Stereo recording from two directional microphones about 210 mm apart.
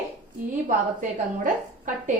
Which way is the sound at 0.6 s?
40° right (ahead or behind).